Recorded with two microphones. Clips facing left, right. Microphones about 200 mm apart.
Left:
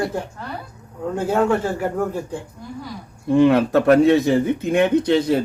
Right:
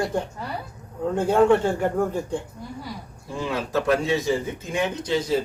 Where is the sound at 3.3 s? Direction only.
65° left (ahead or behind).